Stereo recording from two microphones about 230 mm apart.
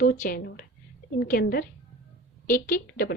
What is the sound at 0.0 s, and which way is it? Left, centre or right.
A woman's voice, left.